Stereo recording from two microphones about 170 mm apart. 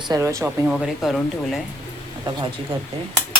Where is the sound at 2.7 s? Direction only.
30° right (ahead or behind).